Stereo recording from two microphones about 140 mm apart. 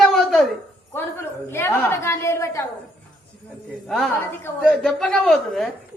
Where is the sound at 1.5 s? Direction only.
20° left (ahead or behind).